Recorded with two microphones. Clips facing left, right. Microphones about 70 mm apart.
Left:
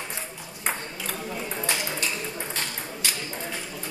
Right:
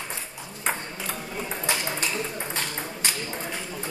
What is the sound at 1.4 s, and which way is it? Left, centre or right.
Ping, right.